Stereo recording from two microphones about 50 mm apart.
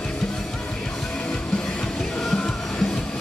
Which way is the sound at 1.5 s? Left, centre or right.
Centre.